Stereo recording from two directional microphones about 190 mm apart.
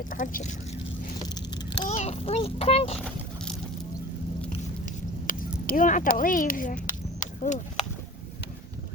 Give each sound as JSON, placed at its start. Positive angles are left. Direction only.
{"t": 0.1, "sound": "speech", "side_deg": 45}
{"t": 1.9, "sound": "a child's voice", "side_deg": 35}
{"t": 5.2, "sound": "speech", "side_deg": 45}
{"t": 6.8, "sound": "a sound", "side_deg": 40}